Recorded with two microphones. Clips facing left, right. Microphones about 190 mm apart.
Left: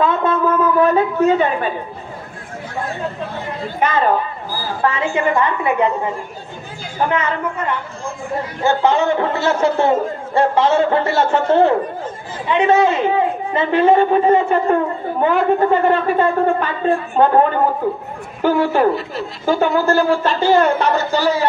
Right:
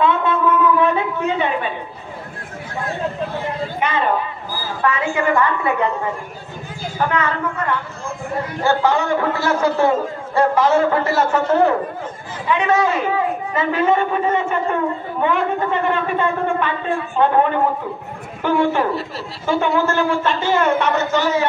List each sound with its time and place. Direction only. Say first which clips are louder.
0.0 s a sound: left 1 dB; 40° left (ahead or behind)
3.8 s a man's voice: left 4 dB; 40° left (ahead or behind)
4.8 s a man's voice: left 1 dB; 25° left (ahead or behind)
7.1 s a man's voice: left 2 dB; 20° left (ahead or behind)